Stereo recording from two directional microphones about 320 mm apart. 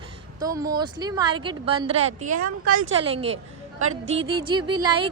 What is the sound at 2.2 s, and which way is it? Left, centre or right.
Speech, right.